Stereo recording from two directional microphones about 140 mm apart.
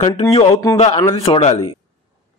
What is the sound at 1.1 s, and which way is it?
Speech, 45° left (ahead or behind).